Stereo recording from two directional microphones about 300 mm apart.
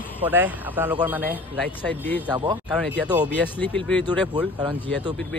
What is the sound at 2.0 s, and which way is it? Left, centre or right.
Speech, centre.